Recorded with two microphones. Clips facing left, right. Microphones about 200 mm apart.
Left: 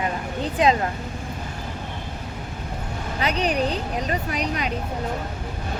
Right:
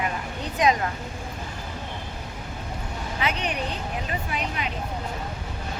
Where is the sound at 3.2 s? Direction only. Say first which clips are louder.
Left 5 dB; 35° left (ahead or behind).